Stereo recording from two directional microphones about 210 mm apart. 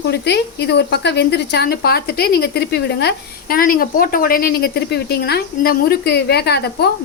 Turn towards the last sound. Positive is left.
turn(degrees=50)  # may be behind; listen again after turning